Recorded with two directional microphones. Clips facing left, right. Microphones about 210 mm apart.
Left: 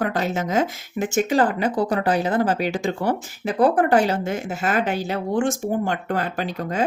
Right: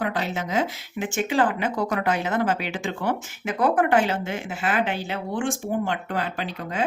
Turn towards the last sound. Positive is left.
turn(degrees=45)  # may be behind; listen again after turning